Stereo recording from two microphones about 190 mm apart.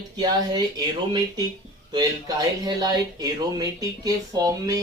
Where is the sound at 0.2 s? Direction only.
20° right (ahead or behind).